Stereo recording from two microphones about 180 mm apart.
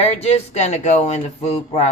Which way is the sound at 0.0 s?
35° left (ahead or behind).